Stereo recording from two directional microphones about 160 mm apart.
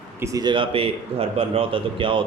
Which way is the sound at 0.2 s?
20° right (ahead or behind).